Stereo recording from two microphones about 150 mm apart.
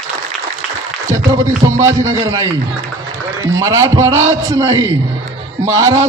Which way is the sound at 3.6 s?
20° right (ahead or behind).